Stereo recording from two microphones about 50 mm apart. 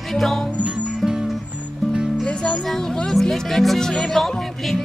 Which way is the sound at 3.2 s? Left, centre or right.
Centre.